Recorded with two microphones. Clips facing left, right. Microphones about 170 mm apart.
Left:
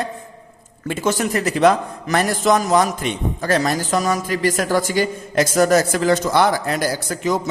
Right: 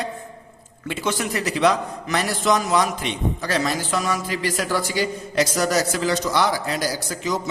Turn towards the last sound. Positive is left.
turn(degrees=55)  # may be behind; listen again after turning